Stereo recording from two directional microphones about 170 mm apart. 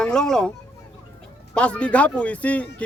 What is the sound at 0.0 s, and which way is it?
Speech, 5° left (ahead or behind).